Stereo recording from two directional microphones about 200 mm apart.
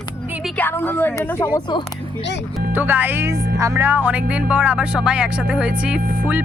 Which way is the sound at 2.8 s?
10° right (ahead or behind).